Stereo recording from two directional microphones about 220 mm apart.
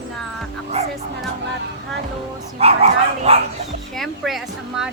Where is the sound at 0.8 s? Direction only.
30° right (ahead or behind).